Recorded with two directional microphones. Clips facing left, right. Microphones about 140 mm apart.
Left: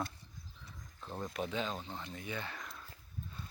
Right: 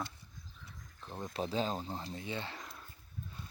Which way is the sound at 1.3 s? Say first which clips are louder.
Right 4 dB; 35° right (ahead or behind).